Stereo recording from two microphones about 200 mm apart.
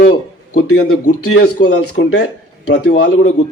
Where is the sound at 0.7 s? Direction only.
90° left.